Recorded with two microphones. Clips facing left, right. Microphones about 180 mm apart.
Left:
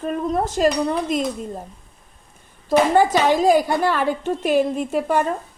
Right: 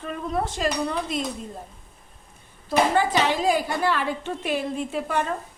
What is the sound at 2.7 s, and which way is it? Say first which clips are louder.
A woman's voice: left 5 dB; 45° left (ahead or behind).